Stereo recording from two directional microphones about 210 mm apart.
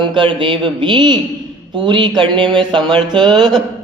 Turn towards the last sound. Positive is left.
turn(degrees=-20)  # may be behind; listen again after turning